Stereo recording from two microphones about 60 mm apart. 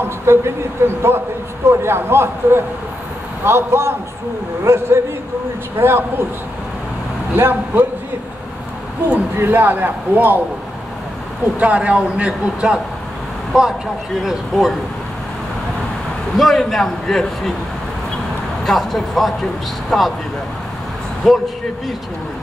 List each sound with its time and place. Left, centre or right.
0.0 s a man's voice: right
7.3 s a man's voice: right
9.4 s a man's voice: right
11.6 s a man's voice: right; by 14.8 s centre
16.3 s a man's voice: centre
18.7 s a man's voice: centre
21.2 s speech: centre